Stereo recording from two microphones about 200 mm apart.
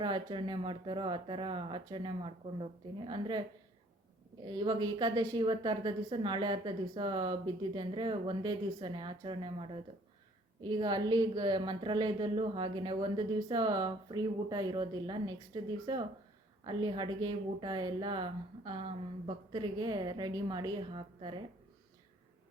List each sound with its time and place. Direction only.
0.0 s a woman's voice: 25° right (ahead or behind)
4.4 s a woman's voice: 20° right (ahead or behind)